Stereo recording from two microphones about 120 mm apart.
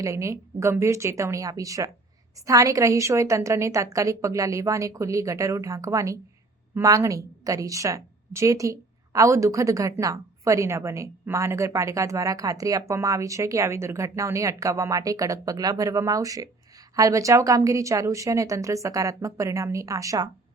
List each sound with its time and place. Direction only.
0.0 s a woman's voice: 25° right (ahead or behind)